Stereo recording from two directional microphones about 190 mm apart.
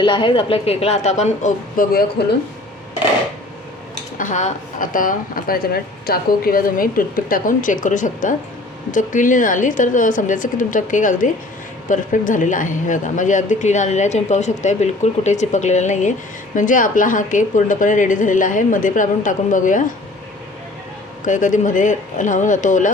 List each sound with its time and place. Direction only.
0.0 s speech: 25° left (ahead or behind); by 2.2 s 50° left (ahead or behind)
4.2 s speech: 40° left (ahead or behind)
21.2 s speech: 40° left (ahead or behind)